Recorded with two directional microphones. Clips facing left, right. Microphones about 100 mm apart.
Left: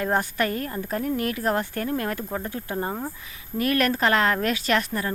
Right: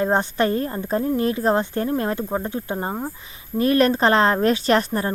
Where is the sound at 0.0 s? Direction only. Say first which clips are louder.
Right 4 dB; 25° right (ahead or behind).